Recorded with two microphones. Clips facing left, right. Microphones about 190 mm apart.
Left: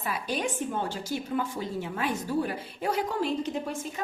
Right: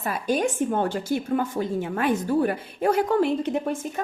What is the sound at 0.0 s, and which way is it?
A woman's voice, 45° right (ahead or behind).